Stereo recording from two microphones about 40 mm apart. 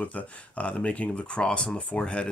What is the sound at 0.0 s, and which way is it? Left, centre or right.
Speech, left.